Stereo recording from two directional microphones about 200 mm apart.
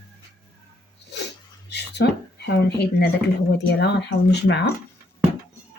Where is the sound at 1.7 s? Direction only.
55° left (ahead or behind).